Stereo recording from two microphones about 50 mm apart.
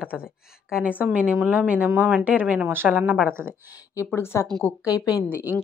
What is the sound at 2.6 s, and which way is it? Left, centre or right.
Speech, right.